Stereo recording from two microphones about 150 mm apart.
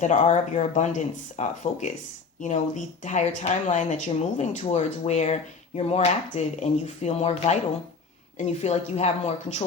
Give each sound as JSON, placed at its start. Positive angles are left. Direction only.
{"t": 0.0, "sound": "speech", "side_deg": 55}